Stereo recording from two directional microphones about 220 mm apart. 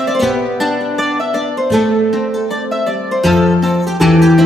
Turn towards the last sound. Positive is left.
turn(degrees=0)  # may be behind; listen again after turning